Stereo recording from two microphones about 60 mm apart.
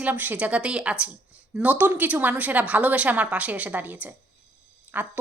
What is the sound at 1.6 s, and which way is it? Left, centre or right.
Speech, right.